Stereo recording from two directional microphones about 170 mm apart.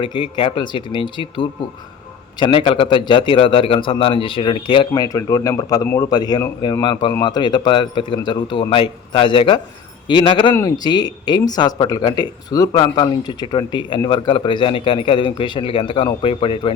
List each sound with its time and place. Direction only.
0.0 s a man's voice: 30° left (ahead or behind)